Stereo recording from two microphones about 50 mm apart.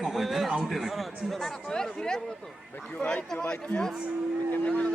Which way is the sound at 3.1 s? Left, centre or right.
Left.